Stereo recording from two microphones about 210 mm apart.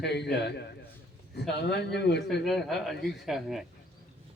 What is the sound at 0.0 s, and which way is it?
A man's voice, 55° left (ahead or behind).